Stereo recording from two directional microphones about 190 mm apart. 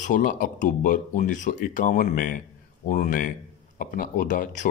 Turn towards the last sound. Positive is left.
turn(degrees=40)  # may be behind; listen again after turning